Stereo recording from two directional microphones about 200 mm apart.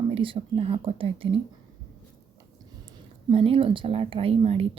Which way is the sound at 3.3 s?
30° right (ahead or behind).